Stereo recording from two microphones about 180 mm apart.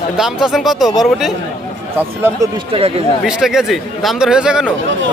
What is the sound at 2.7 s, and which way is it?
Speech, 35° right (ahead or behind).